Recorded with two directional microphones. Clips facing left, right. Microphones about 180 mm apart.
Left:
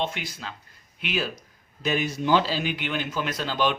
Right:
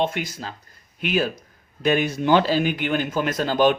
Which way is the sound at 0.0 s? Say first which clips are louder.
Right 6 dB; 50° right (ahead or behind).